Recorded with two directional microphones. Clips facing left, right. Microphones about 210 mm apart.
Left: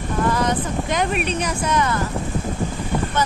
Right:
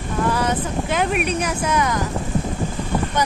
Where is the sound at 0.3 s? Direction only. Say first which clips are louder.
Even; 10° right (ahead or behind).